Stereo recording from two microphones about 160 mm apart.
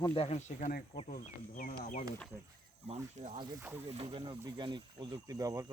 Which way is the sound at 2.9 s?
40° right (ahead or behind).